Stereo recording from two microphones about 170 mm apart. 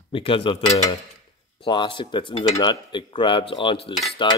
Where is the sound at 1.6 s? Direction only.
30° left (ahead or behind).